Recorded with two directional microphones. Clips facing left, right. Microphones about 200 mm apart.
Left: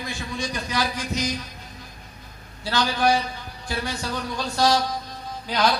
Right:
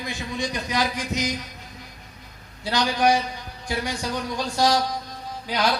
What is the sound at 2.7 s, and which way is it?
A man's voice, 15° right (ahead or behind).